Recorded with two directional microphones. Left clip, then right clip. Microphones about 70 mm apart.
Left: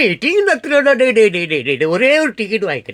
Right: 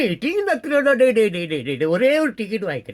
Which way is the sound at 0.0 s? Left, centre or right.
Right.